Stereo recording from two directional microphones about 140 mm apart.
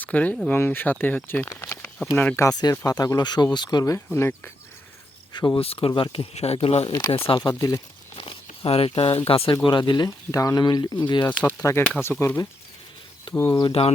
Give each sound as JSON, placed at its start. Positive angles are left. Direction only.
{"t": 0.0, "sound": "speech", "side_deg": 10}
{"t": 5.3, "sound": "speech", "side_deg": 30}
{"t": 5.5, "sound": "speech", "side_deg": 45}
{"t": 6.8, "sound": "speech", "side_deg": 35}
{"t": 8.1, "sound": "speech", "side_deg": 40}
{"t": 11.5, "sound": "speech", "side_deg": 20}
{"t": 12.0, "sound": "speech", "side_deg": 0}
{"t": 13.3, "sound": "speech", "side_deg": 20}